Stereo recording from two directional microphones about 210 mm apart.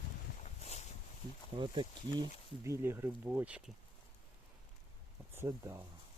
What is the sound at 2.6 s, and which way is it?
Speech, 10° right (ahead or behind).